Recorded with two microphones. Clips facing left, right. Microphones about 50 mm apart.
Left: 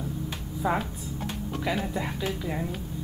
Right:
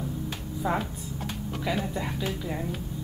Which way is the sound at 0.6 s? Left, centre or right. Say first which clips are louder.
Left 1 dB; centre.